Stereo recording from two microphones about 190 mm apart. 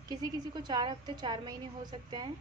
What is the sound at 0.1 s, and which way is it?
A woman's voice, 20° right (ahead or behind).